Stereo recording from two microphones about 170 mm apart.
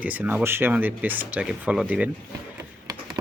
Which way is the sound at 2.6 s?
20° right (ahead or behind).